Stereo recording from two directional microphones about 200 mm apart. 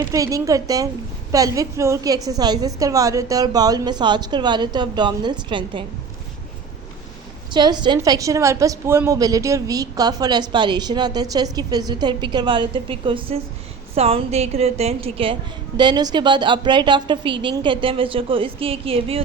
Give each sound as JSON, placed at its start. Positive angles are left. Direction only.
{"t": 0.0, "sound": "a woman's voice", "side_deg": -15}
{"t": 7.5, "sound": "a woman's voice", "side_deg": -20}